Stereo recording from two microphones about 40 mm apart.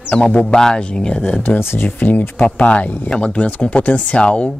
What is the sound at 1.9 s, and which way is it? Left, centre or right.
Speech, left.